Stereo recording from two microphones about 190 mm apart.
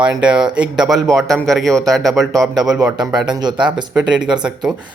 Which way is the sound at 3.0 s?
20° right (ahead or behind).